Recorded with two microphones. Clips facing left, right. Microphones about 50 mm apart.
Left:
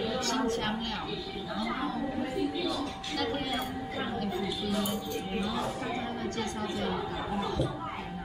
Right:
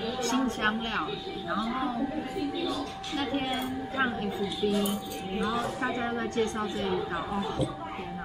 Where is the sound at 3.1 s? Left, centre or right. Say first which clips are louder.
Right 2 dB; right.